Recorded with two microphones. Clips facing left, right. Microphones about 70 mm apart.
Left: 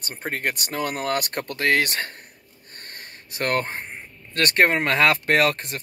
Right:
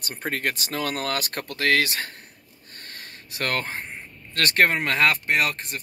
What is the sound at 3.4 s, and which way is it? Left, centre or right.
Speech, left.